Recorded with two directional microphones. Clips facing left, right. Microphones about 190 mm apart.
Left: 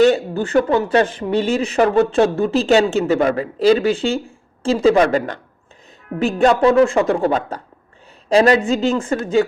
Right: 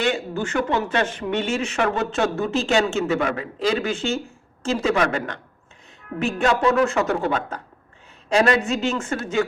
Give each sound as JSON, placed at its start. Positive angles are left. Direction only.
{"t": 0.0, "sound": "speech", "side_deg": 35}